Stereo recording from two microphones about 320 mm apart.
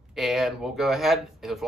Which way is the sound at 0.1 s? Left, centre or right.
Centre.